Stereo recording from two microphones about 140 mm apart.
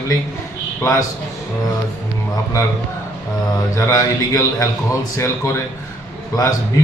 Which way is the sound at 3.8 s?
20° left (ahead or behind).